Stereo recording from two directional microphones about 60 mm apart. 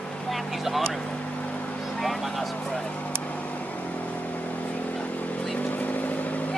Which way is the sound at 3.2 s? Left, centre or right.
Left.